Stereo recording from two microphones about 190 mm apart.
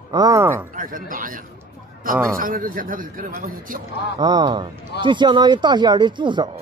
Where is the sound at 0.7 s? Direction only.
45° right (ahead or behind).